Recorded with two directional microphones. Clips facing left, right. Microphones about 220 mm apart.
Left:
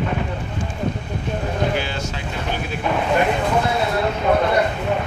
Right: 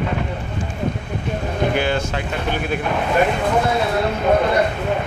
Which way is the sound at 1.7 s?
55° right (ahead or behind).